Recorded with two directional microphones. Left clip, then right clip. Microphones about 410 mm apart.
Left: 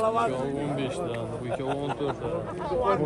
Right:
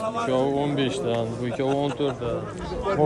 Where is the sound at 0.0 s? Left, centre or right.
Centre.